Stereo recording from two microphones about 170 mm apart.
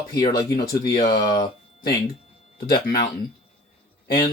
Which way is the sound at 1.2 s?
25° left (ahead or behind).